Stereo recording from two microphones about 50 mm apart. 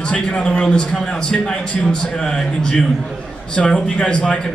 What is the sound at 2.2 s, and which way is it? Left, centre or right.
A man's voice, centre.